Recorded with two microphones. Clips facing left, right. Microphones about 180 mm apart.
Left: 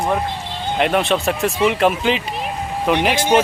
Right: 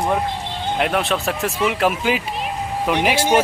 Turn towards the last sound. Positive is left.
turn(degrees=-10)  # may be behind; listen again after turning